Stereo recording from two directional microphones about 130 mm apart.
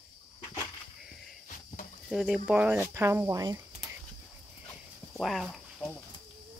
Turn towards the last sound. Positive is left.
turn(degrees=0)  # may be behind; listen again after turning